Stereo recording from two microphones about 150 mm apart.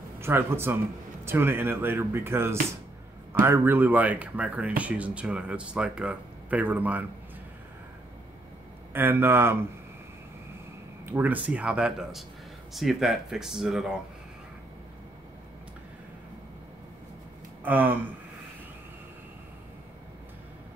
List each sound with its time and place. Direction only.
0.2 s speech: 15° right (ahead or behind)
8.9 s speech: 15° right (ahead or behind)
11.1 s speech: 15° right (ahead or behind)
17.6 s speech: 10° right (ahead or behind)